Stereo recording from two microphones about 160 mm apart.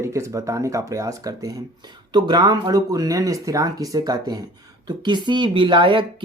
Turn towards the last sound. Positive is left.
turn(degrees=-30)  # may be behind; listen again after turning